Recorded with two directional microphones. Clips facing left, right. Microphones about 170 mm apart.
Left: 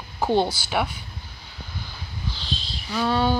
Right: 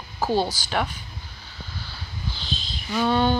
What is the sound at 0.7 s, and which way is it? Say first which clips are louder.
Speech: left 1 dB; 10° left (ahead or behind).